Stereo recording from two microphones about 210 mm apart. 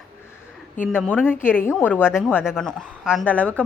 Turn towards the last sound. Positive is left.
turn(degrees=5)  # may be behind; listen again after turning